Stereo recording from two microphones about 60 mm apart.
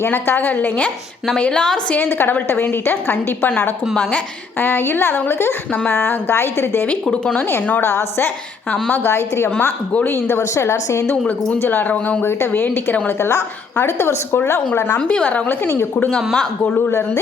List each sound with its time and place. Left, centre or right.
0.0 s a woman's voice: left
1.4 s a woman's voice: centre
2.0 s a woman's voice: left
4.6 s a woman's voice: left
6.8 s speech: left
9.0 s a woman's voice: left
9.6 s speech: left
10.1 s a woman's voice: left
11.6 s a woman's voice: left
13.8 s a woman's voice: left
14.9 s speech: left